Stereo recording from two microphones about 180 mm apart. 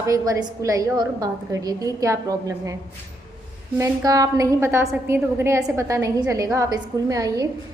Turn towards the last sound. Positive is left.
turn(degrees=-20)  # may be behind; listen again after turning